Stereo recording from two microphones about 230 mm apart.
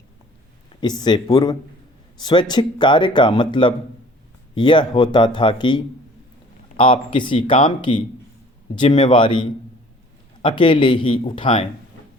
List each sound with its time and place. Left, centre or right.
0.8 s speech: centre